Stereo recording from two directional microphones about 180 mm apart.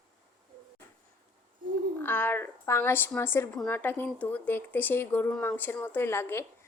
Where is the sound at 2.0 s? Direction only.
10° left (ahead or behind).